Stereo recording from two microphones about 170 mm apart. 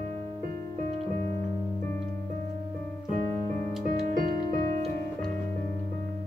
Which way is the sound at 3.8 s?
50° right (ahead or behind).